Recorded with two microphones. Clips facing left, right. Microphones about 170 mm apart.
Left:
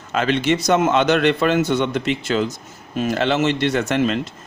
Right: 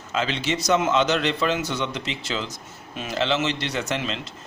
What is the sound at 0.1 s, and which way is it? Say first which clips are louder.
A man's voice: left 7 dB; 55° left (ahead or behind).